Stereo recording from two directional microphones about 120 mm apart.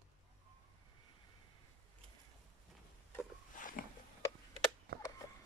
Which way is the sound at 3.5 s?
90° left.